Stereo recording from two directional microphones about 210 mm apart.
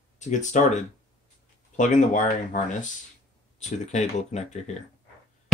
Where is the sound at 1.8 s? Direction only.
35° left (ahead or behind).